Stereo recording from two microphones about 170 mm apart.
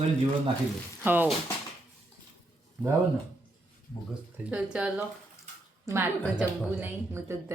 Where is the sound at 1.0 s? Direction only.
10° right (ahead or behind).